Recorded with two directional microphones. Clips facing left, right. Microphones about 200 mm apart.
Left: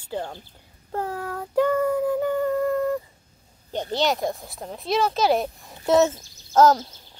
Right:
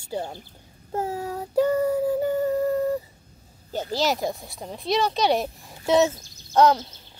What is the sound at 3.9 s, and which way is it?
Speech, centre (ahead or behind).